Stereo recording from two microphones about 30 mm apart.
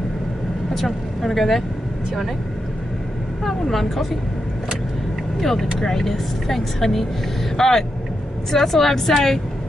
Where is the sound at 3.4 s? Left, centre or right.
Centre.